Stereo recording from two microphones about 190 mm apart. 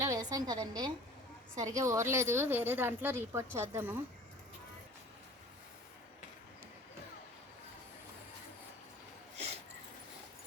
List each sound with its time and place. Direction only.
0.0 s a woman's voice: 20° right (ahead or behind)